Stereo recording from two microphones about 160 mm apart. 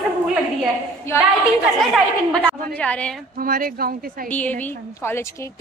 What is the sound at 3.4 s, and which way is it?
Speech, 60° right (ahead or behind).